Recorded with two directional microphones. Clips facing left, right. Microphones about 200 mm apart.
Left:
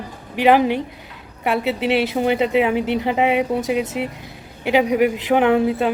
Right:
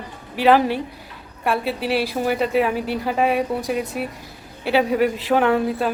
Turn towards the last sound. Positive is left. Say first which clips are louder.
# left 3 dB
turn(degrees=20)  # may be behind; listen again after turning